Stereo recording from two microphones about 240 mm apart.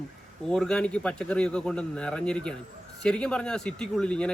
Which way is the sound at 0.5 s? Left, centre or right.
Centre.